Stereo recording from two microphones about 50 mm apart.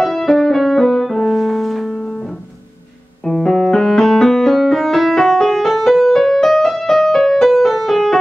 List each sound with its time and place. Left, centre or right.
0.0 s music: centre
2.0 s music: centre
3.3 s music: centre